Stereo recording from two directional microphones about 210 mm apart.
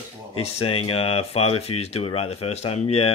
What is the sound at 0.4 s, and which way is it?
Speech, 30° left (ahead or behind).